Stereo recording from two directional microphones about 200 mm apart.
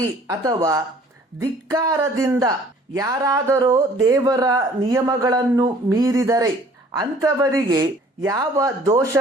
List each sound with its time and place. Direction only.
0.0 s speech: 15° right (ahead or behind)